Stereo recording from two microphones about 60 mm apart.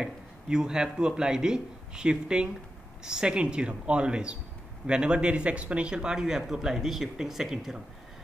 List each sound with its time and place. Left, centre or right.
0.0 s speech: centre